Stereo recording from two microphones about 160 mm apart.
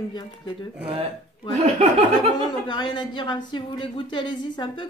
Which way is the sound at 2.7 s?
30° left (ahead or behind).